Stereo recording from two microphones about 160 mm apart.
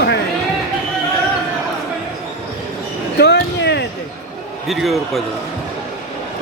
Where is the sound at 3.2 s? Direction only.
90° left.